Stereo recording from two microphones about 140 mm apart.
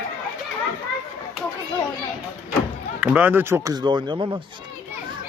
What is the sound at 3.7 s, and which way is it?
Speech, 35° right (ahead or behind).